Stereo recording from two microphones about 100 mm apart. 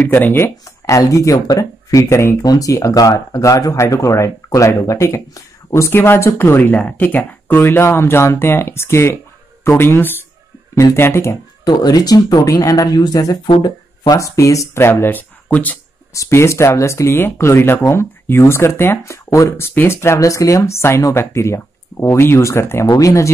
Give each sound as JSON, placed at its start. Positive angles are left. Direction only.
{"t": 0.1, "sound": "speech", "side_deg": 25}
{"t": 11.6, "sound": "speech", "side_deg": 45}
{"t": 16.1, "sound": "speech", "side_deg": 30}